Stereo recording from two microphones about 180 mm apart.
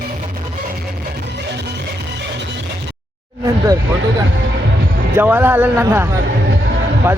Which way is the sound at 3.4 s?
20° right (ahead or behind).